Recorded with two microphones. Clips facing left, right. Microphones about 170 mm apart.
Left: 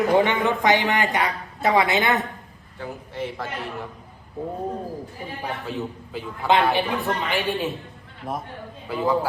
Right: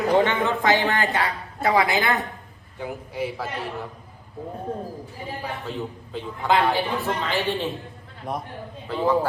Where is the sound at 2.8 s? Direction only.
10° right (ahead or behind).